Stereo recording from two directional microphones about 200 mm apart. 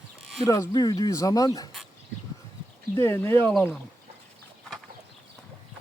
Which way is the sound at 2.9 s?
15° left (ahead or behind).